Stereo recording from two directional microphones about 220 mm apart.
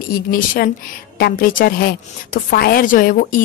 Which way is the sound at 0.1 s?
40° left (ahead or behind).